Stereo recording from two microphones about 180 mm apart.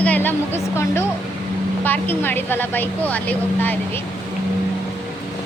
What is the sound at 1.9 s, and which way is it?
Vehicle, 10° left (ahead or behind).